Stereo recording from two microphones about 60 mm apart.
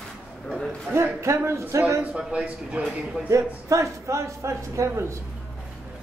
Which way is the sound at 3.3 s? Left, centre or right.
Right.